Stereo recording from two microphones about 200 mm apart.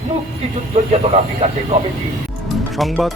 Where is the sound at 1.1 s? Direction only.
30° right (ahead or behind).